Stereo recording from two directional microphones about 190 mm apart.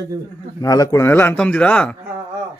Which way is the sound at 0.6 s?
20° left (ahead or behind).